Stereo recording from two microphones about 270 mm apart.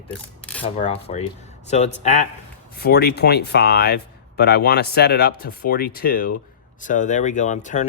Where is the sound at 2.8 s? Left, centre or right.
Left.